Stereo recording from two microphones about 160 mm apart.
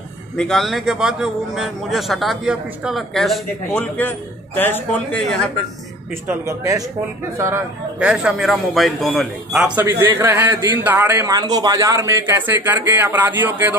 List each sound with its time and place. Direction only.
0.4 s a man's voice: centre (ahead or behind)
6.2 s a man's voice: 20° right (ahead or behind)
8.0 s a man's voice: 5° right (ahead or behind)
9.8 s a man's voice: 15° right (ahead or behind)